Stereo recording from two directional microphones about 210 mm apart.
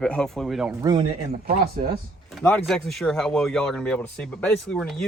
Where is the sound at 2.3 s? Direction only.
5° left (ahead or behind).